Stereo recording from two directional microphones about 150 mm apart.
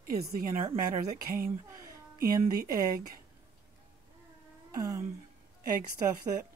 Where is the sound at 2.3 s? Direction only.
25° right (ahead or behind).